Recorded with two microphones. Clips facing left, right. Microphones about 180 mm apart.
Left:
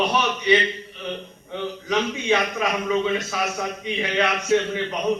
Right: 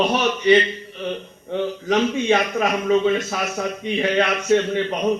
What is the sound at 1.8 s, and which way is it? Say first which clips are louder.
A man's voice: right 4 dB; 50° right (ahead or behind).